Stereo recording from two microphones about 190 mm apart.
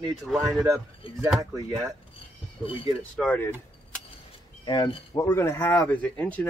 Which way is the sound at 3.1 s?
5° left (ahead or behind).